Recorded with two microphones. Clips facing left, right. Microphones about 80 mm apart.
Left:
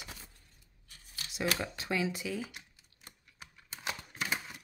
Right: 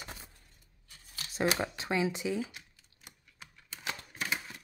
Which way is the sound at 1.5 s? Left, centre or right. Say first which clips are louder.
Right 2 dB; right.